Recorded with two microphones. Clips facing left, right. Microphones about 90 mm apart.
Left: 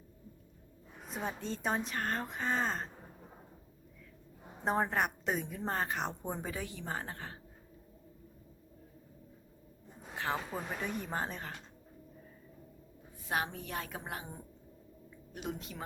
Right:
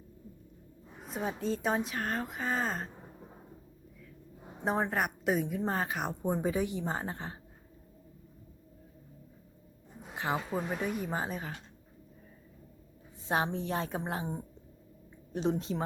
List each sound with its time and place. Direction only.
1.1 s a woman's voice: centre (ahead or behind)
4.6 s a woman's voice: centre (ahead or behind); by 7.3 s 20° right (ahead or behind)
10.0 s a woman's voice: 15° right (ahead or behind)
13.2 s a woman's voice: 25° right (ahead or behind)